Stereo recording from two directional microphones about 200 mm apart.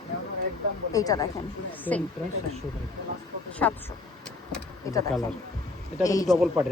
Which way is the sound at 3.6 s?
5° left (ahead or behind).